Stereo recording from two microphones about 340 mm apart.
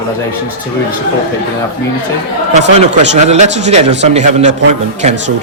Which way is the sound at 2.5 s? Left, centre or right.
Right.